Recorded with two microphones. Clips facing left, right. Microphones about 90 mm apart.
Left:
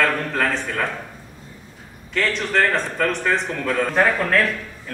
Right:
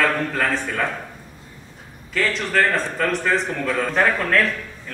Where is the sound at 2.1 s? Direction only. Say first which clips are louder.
Even; centre (ahead or behind).